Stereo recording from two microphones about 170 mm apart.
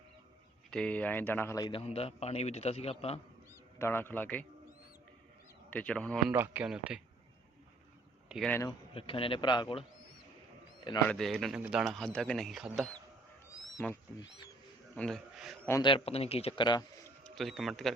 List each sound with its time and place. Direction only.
0.7 s speech: 5° left (ahead or behind)
1.6 s a man's voice: 35° left (ahead or behind)
3.8 s speech: 15° left (ahead or behind)
5.7 s speech: 5° left (ahead or behind)
6.3 s speech: 10° right (ahead or behind)
8.4 s speech: 15° left (ahead or behind)
8.9 s a man's voice: 30° left (ahead or behind)
11.1 s speech: centre (ahead or behind)
14.9 s speech: 5° left (ahead or behind)
15.8 s a man's voice: 30° left (ahead or behind)
17.0 s speech: 5° left (ahead or behind)